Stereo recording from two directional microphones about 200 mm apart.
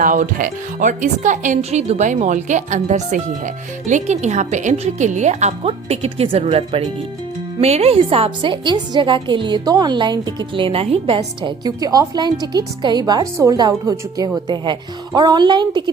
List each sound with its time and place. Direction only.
0.0 s a woman's voice: 40° right (ahead or behind); by 15.8 s 20° right (ahead or behind)